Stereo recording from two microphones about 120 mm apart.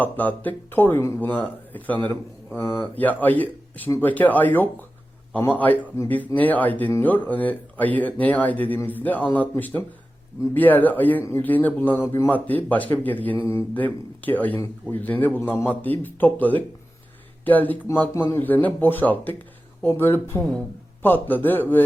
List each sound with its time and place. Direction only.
0.0 s a man's voice: 15° left (ahead or behind)